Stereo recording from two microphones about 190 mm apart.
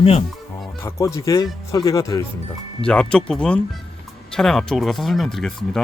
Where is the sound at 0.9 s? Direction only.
15° left (ahead or behind).